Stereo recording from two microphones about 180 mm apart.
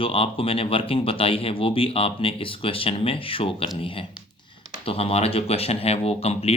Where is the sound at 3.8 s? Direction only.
30° left (ahead or behind).